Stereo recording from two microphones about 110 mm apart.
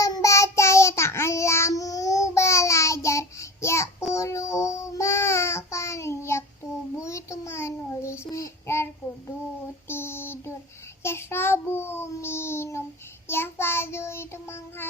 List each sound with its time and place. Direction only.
0.0 s child singing: 30° left (ahead or behind)
9.9 s a sound: 20° left (ahead or behind)
11.0 s child singing: 25° left (ahead or behind)